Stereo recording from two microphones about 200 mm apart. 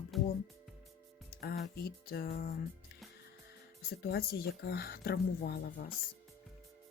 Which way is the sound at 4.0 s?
50° left (ahead or behind).